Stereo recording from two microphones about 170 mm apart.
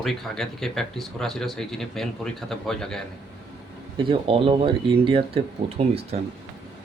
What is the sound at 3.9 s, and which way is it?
Speech, 30° right (ahead or behind).